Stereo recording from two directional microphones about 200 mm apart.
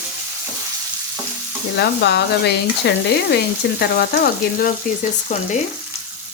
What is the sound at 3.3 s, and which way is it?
Frying, 55° left (ahead or behind).